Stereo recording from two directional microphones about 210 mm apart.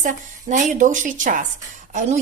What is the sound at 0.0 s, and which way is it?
Speech, 35° right (ahead or behind).